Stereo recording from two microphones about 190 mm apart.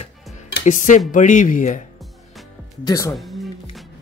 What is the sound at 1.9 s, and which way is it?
Music, centre (ahead or behind).